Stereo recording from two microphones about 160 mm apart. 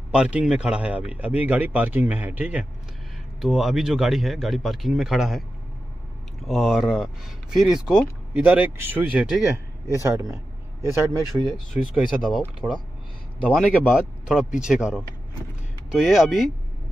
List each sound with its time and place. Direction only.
0.1 s a man's voice: 5° right (ahead or behind)
6.4 s a man's voice: centre (ahead or behind)
10.0 s a man's voice: 15° right (ahead or behind)
11.5 s a man's voice: centre (ahead or behind)
13.8 s a man's voice: 5° right (ahead or behind)